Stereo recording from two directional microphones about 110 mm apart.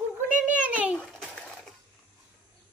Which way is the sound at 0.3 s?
10° right (ahead or behind).